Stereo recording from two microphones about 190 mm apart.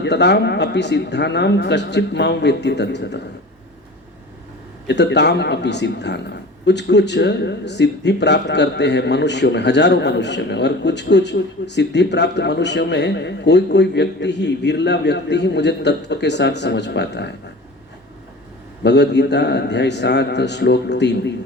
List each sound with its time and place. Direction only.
0.0 s speech: 65° left (ahead or behind)
4.9 s speech: 65° left (ahead or behind)
18.8 s speech: 65° left (ahead or behind)